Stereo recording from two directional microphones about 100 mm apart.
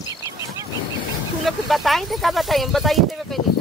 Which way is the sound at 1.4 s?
Centre (ahead or behind).